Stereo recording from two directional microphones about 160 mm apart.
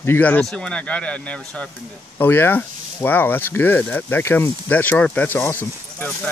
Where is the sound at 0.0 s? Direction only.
10° left (ahead or behind).